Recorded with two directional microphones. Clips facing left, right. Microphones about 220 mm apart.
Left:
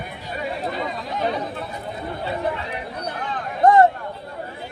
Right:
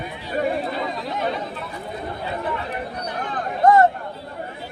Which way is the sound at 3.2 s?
50° right (ahead or behind).